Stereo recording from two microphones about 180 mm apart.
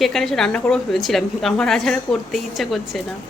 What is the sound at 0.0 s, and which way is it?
Speech, centre (ahead or behind).